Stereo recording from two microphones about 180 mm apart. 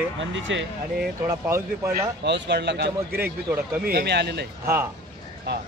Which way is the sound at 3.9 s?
70° right (ahead or behind).